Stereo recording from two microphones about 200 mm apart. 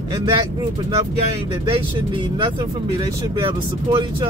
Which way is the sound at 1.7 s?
25° right (ahead or behind).